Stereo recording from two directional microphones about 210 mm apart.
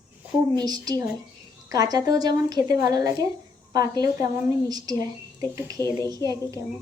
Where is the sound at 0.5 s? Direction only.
20° right (ahead or behind).